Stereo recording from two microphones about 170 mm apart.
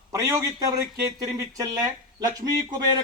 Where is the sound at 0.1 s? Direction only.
20° right (ahead or behind).